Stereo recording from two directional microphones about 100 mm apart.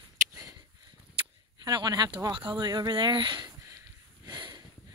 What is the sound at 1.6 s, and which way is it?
Speech, 40° right (ahead or behind).